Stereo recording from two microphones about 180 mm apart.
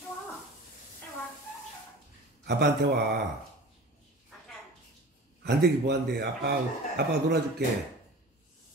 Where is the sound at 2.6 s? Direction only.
65° right (ahead or behind).